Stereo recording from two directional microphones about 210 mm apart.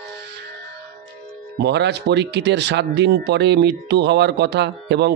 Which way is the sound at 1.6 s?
55° right (ahead or behind).